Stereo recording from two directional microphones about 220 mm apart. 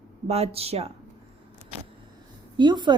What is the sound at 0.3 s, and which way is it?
Speech, 30° right (ahead or behind).